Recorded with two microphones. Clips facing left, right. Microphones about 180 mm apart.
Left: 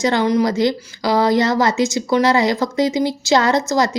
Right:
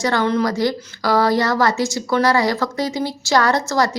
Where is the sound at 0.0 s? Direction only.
15° left (ahead or behind).